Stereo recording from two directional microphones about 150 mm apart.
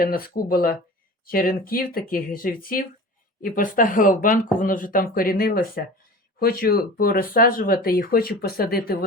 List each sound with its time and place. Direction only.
0.0 s speech: 75° left (ahead or behind)
6.4 s speech: 90° left